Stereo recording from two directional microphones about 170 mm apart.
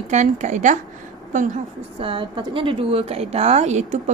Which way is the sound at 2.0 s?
30° right (ahead or behind).